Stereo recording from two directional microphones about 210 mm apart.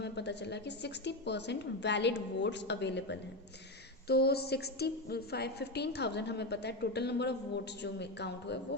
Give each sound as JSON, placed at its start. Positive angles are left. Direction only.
{"t": 0.0, "sound": "a woman's voice", "side_deg": 55}